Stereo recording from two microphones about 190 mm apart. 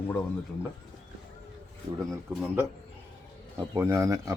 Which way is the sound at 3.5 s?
15° right (ahead or behind).